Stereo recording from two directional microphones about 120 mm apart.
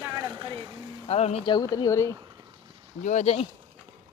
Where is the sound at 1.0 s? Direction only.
60° left (ahead or behind).